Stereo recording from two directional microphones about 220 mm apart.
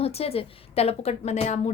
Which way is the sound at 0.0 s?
25° left (ahead or behind).